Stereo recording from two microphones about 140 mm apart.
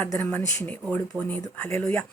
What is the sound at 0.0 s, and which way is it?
Speech, 15° left (ahead or behind).